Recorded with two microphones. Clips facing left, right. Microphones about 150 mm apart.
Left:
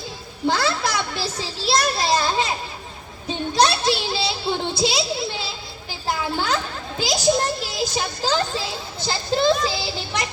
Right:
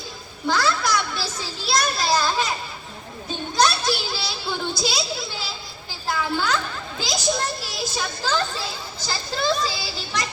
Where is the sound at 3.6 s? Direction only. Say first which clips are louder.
Left 2 dB; 25° left (ahead or behind).